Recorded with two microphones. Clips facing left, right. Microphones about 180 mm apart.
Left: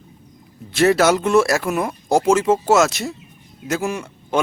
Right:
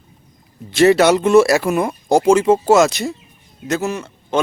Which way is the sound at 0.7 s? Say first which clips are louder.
Right 3 dB; centre (ahead or behind).